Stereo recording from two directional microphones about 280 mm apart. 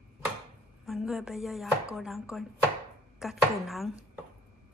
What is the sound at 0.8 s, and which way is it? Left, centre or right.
Speech, centre.